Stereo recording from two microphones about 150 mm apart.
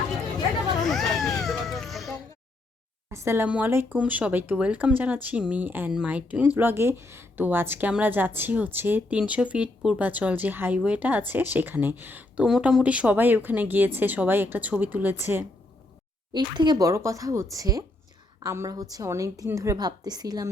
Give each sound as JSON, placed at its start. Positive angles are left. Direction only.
{"t": 0.8, "sound": "baby cry", "side_deg": 0}
{"t": 3.1, "sound": "speech", "side_deg": -15}
{"t": 16.3, "sound": "a woman's voice", "side_deg": -30}